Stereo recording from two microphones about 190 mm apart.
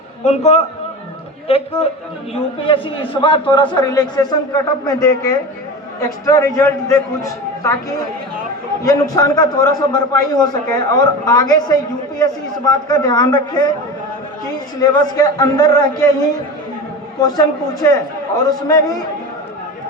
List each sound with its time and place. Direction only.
0.3 s a man's voice: 35° left (ahead or behind)
2.6 s a man's voice: 25° left (ahead or behind)
8.8 s a man's voice: 20° left (ahead or behind)
14.8 s a man's voice: 20° left (ahead or behind)
17.2 s a man's voice: 20° left (ahead or behind)